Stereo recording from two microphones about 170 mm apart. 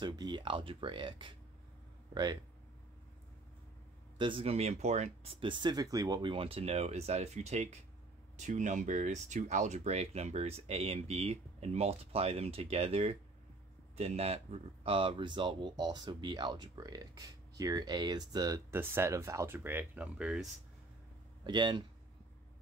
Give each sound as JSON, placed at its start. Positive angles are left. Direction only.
{"t": 0.0, "sound": "speech", "side_deg": -25}
{"t": 4.2, "sound": "speech", "side_deg": -30}
{"t": 21.5, "sound": "speech", "side_deg": -25}